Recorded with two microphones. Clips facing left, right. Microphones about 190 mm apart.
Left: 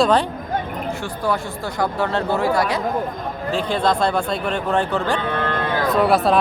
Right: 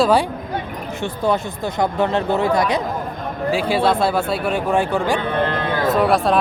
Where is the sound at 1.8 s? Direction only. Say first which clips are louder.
Right 2 dB; 20° right (ahead or behind).